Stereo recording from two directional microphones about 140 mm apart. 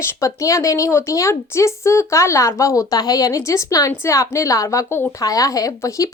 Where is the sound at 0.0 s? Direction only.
20° left (ahead or behind).